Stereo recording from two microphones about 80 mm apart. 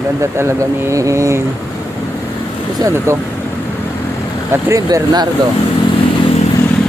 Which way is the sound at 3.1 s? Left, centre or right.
Right.